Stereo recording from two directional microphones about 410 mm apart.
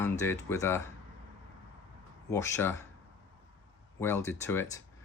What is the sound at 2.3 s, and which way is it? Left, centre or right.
Speech, centre.